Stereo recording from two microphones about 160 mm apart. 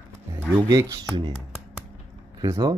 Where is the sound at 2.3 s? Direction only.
20° right (ahead or behind).